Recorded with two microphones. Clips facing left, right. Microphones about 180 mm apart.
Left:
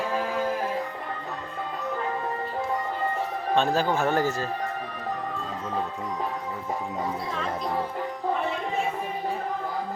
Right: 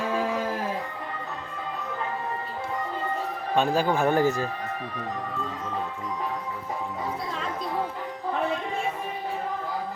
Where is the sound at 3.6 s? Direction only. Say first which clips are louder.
Right 1 dB; 15° right (ahead or behind).